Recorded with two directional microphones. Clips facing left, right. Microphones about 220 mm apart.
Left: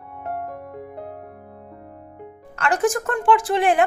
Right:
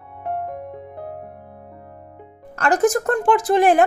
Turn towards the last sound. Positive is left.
turn(degrees=-40)  # may be behind; listen again after turning